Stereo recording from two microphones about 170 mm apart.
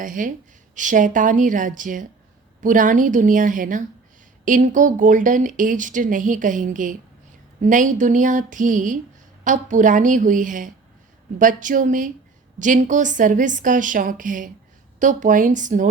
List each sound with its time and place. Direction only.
0.0 s speech: 50° right (ahead or behind)